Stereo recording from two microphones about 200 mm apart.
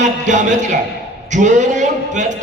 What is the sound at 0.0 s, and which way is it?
A man's voice, 35° right (ahead or behind).